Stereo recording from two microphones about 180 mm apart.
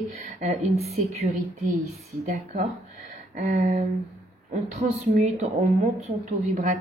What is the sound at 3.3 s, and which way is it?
Speech, 45° right (ahead or behind).